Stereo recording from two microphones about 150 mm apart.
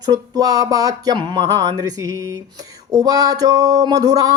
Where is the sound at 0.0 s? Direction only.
25° right (ahead or behind).